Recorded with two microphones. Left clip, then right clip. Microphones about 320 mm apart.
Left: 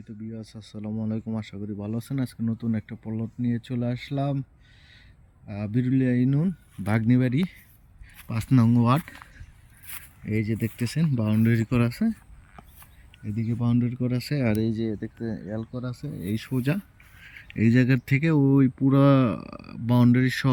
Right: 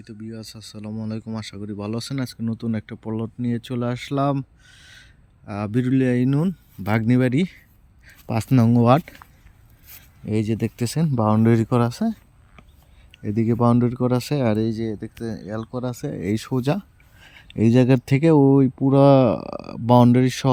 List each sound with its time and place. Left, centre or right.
0.3 s speech: centre
10.4 s speech: centre
11.3 s speech: right
13.2 s speech: right
14.3 s speech: centre
19.5 s speech: right
19.9 s speech: centre